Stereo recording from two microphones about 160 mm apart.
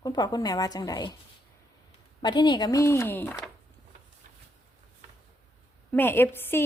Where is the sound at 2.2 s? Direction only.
30° left (ahead or behind).